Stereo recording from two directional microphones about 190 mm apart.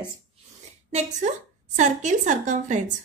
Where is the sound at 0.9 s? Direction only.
40° right (ahead or behind).